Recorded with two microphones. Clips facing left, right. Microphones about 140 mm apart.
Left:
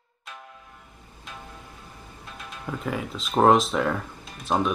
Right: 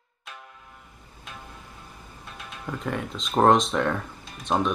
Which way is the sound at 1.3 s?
Centre (ahead or behind).